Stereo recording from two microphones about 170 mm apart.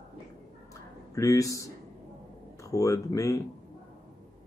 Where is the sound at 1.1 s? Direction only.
20° left (ahead or behind).